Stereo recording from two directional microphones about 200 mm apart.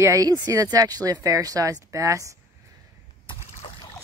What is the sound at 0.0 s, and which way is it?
Speech, 15° right (ahead or behind).